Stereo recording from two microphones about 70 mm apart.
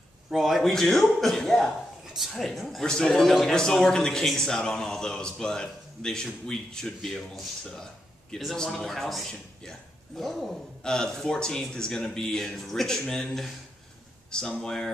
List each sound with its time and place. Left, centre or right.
0.3 s a man's voice: centre
14.6 s a man's voice: centre